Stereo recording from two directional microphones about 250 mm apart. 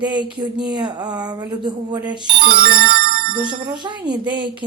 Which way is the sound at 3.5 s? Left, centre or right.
Centre.